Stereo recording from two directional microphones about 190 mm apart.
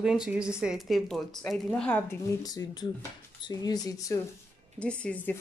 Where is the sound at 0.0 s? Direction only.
5° right (ahead or behind); by 4.2 s 15° left (ahead or behind).